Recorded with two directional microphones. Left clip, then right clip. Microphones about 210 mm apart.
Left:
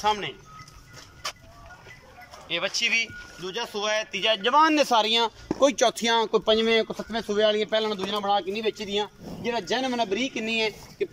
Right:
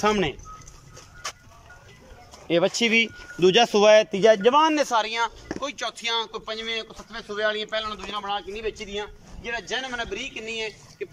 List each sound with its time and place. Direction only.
0.0 s speech: 55° right (ahead or behind)
1.2 s music: 5° left (ahead or behind)
2.4 s speech: 35° right (ahead or behind)
4.4 s a man's voice: 15° right (ahead or behind)
4.6 s speech: 5° left (ahead or behind)
5.6 s speech: 35° left (ahead or behind)